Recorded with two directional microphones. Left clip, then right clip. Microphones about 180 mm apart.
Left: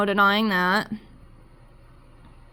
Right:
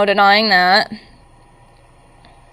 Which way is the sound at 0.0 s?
40° left (ahead or behind).